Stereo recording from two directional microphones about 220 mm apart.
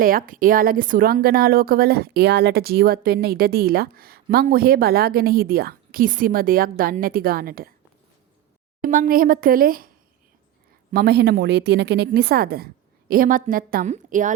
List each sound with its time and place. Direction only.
0.0 s a woman's voice: 40° right (ahead or behind)
8.8 s speech: 40° right (ahead or behind)
10.9 s a woman's voice: 45° right (ahead or behind)